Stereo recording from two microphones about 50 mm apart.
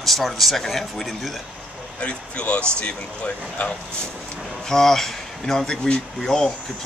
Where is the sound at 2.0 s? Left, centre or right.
Left.